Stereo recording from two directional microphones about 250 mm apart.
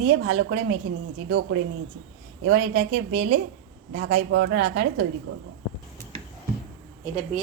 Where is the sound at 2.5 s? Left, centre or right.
Right.